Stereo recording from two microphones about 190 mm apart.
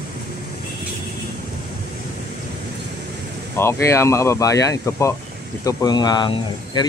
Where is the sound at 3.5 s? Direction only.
15° left (ahead or behind).